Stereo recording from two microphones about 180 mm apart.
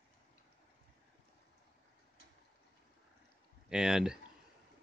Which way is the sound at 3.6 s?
5° right (ahead or behind).